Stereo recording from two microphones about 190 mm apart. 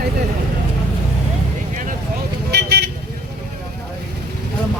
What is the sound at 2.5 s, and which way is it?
Vehicle, 60° right (ahead or behind).